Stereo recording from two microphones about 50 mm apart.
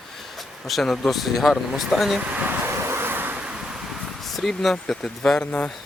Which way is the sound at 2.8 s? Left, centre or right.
Right.